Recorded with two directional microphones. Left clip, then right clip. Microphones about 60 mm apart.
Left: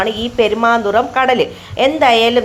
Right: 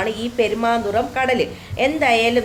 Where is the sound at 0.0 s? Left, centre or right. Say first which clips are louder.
Left 5 dB; left.